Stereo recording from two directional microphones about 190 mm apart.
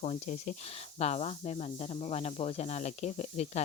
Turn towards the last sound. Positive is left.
turn(degrees=35)  # may be behind; listen again after turning